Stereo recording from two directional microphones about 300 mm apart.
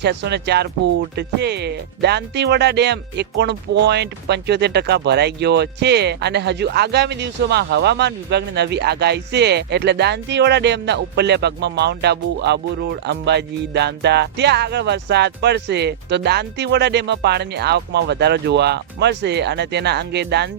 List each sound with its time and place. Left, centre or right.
0.0 s speech: right